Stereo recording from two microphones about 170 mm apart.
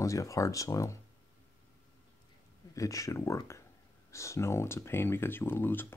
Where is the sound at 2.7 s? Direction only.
20° left (ahead or behind).